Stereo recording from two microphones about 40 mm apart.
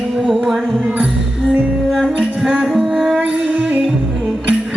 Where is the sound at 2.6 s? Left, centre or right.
Centre.